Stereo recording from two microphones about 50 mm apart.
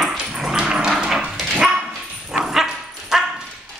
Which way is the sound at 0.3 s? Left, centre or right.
Centre.